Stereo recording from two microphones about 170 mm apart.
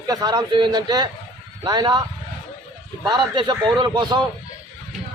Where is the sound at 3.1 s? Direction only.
25° right (ahead or behind).